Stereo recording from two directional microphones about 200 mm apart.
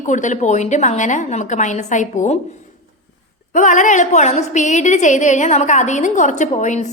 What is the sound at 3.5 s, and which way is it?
A woman's voice, 40° left (ahead or behind).